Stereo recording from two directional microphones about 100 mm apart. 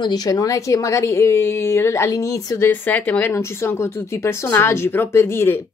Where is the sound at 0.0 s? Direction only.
40° left (ahead or behind).